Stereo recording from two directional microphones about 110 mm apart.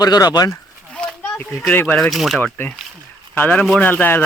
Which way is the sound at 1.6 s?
15° left (ahead or behind).